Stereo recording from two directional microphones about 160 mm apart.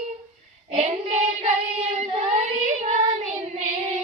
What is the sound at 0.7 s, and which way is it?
Child singing, 45° right (ahead or behind).